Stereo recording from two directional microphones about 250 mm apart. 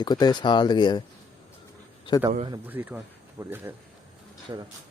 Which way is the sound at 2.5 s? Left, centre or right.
Centre.